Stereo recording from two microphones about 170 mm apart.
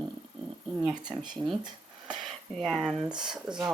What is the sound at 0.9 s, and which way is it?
Speech, 25° right (ahead or behind).